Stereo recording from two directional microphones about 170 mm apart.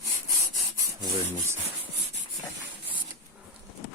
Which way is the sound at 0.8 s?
15° right (ahead or behind).